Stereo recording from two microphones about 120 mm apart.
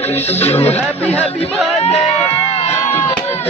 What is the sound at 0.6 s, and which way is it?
Speech, 15° left (ahead or behind).